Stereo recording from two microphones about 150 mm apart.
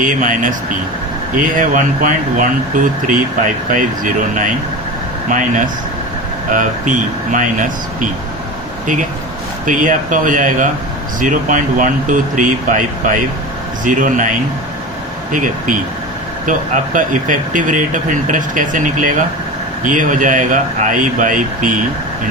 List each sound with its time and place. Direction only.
0.0 s speech: 60° right (ahead or behind)
9.6 s speech: 60° right (ahead or behind)